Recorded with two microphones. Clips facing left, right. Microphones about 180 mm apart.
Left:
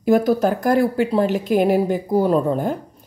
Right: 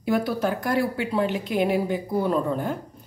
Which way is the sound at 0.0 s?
45° left (ahead or behind).